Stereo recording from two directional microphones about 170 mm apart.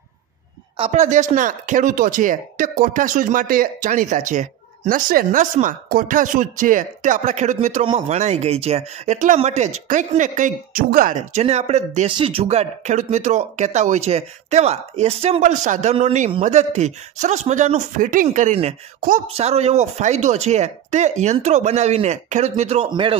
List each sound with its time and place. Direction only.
0.7 s speech: 40° right (ahead or behind)
7.8 s speech: 30° right (ahead or behind)
18.9 s speech: 55° right (ahead or behind)
19.3 s speech: 40° right (ahead or behind)